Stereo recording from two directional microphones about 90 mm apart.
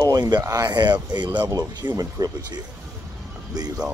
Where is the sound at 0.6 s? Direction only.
50° right (ahead or behind).